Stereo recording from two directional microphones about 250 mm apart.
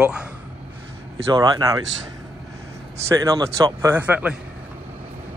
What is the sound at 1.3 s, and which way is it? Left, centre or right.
Speech, centre.